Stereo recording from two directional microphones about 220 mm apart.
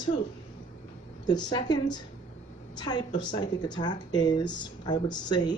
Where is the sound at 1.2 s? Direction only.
20° left (ahead or behind).